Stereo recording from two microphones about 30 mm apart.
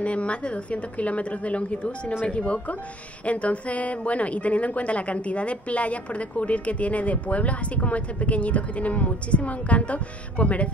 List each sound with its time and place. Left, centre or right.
0.0 s a woman's voice: left